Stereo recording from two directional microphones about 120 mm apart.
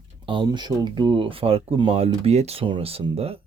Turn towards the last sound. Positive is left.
turn(degrees=-55)  # may be behind; listen again after turning